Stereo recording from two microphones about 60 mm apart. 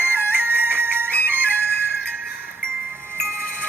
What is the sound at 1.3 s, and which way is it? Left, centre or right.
Flute, right.